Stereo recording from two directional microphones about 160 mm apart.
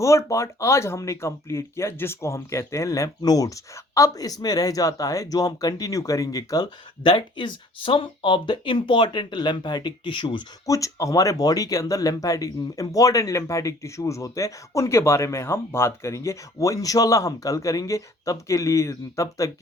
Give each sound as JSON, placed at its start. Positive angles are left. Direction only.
{"t": 0.0, "sound": "speech", "side_deg": 20}